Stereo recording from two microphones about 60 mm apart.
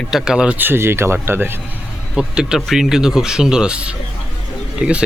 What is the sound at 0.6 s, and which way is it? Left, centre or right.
Speech, right.